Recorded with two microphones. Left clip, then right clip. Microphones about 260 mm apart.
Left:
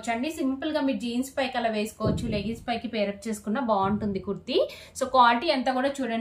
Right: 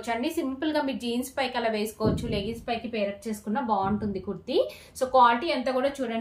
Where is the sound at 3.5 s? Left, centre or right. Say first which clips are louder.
Left 1 dB; centre.